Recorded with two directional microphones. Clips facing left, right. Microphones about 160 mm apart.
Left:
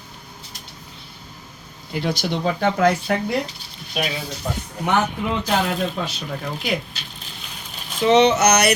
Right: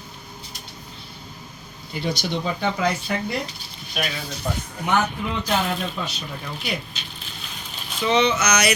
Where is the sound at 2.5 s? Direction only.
55° left (ahead or behind).